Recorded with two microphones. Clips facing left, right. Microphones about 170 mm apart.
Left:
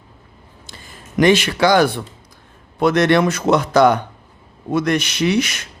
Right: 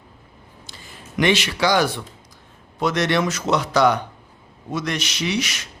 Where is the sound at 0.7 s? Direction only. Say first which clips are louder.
Left 4 dB; 55° left (ahead or behind).